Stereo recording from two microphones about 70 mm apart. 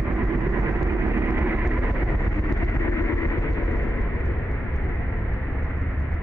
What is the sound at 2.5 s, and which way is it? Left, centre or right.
Vehicle, left.